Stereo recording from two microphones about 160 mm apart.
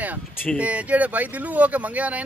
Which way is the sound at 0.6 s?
10° right (ahead or behind).